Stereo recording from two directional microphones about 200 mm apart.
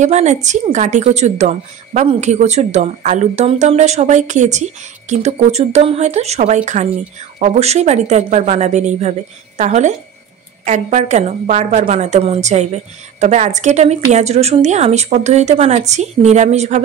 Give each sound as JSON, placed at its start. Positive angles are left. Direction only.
{"t": 0.0, "sound": "a woman's voice", "side_deg": -35}